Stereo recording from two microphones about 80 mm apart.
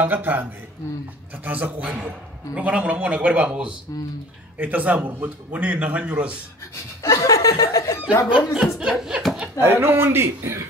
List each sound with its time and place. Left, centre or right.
0.0 s a man's voice: right
7.0 s speech: left
8.7 s a man's voice: centre
9.6 s a man's voice: right